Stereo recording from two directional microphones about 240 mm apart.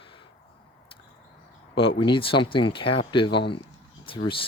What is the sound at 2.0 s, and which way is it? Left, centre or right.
Speech, left.